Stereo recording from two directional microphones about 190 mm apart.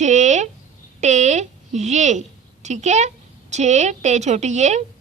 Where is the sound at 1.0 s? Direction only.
40° right (ahead or behind).